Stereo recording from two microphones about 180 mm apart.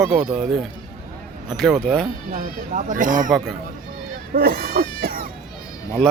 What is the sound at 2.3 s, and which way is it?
Speech, 45° right (ahead or behind).